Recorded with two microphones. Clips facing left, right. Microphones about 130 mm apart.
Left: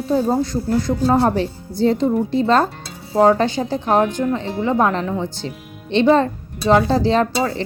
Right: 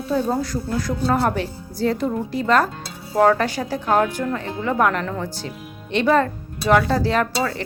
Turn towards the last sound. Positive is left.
turn(degrees=25)  # may be behind; listen again after turning